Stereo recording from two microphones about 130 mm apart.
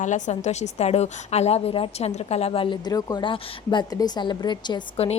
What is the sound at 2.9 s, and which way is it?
Speech, 30° left (ahead or behind).